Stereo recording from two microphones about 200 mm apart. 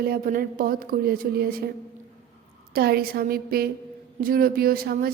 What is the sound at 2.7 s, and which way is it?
A woman's voice, 50° right (ahead or behind).